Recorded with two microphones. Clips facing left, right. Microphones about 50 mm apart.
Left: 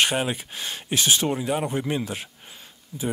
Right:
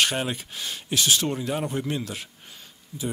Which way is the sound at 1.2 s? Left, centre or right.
Centre.